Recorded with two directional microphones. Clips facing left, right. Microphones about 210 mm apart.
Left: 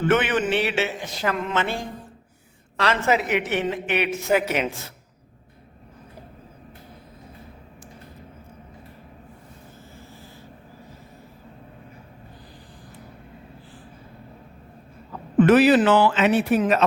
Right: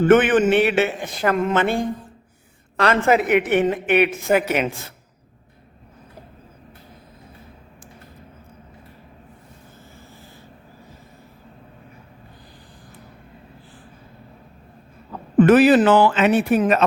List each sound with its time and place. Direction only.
0.0 s a man's voice: 50° right (ahead or behind)
15.4 s a man's voice: 50° right (ahead or behind)